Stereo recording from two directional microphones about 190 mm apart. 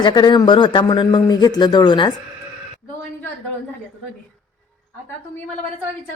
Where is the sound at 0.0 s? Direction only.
25° left (ahead or behind).